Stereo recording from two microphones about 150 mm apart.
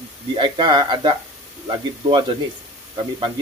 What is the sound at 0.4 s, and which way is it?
Speech, 30° right (ahead or behind).